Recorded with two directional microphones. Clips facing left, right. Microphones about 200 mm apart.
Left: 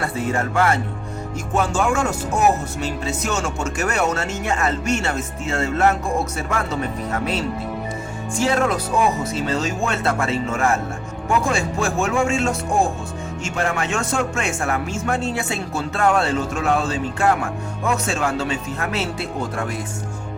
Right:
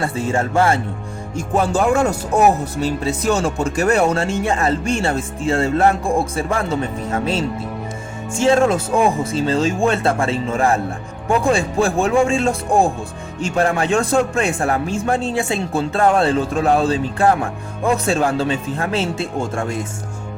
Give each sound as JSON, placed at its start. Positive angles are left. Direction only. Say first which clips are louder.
{"t": 0.0, "sound": "a man's voice", "louder": "right 3 dB", "side_deg": -25}
{"t": 8.4, "sound": "a man's voice", "louder": "right 5 dB", "side_deg": -25}